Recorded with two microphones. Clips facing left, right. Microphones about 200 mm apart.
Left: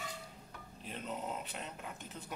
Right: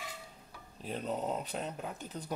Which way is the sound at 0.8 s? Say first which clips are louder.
Right 6 dB; 40° right (ahead or behind).